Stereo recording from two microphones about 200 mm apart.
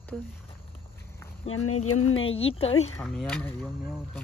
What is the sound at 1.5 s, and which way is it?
Speech, 90° left.